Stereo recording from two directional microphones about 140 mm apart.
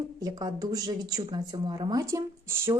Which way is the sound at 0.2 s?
25° right (ahead or behind).